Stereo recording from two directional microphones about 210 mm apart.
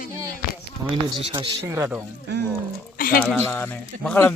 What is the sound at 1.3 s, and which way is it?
Speech, 25° right (ahead or behind).